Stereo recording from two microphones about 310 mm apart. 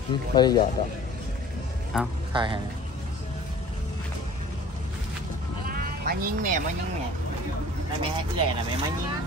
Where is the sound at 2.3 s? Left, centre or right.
Centre.